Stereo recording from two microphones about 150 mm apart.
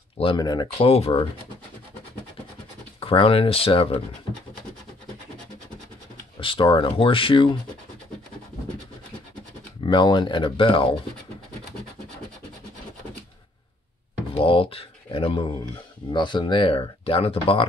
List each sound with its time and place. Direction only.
0.2 s speech: 30° left (ahead or behind)
0.7 s speech: 40° left (ahead or behind)
3.0 s speech: 35° left (ahead or behind)
6.4 s speech: 35° left (ahead or behind)
9.8 s speech: 30° left (ahead or behind)
14.3 s a sound: 35° left (ahead or behind)
16.1 s speech: 30° left (ahead or behind)